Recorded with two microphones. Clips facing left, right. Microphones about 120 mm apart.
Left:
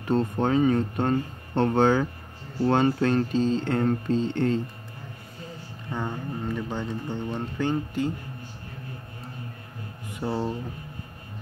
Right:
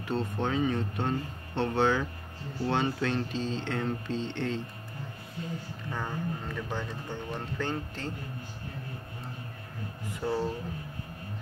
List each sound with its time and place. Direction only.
0.1 s speech: 45° left (ahead or behind)
5.9 s speech: 20° left (ahead or behind)
10.1 s speech: 20° left (ahead or behind)